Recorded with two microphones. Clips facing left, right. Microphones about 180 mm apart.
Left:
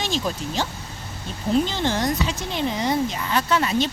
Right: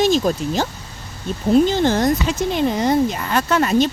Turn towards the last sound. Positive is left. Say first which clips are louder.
# right 5 dB
turn(degrees=-45)  # may be behind; listen again after turning